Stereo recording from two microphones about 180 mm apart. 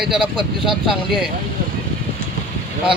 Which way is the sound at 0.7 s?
Centre (ahead or behind).